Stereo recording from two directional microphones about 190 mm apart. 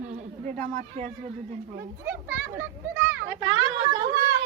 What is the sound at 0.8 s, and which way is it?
Speech, 40° right (ahead or behind).